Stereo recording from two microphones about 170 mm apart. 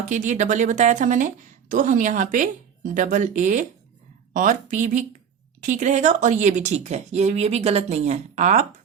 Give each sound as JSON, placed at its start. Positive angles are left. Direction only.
{"t": 0.1, "sound": "speech", "side_deg": -45}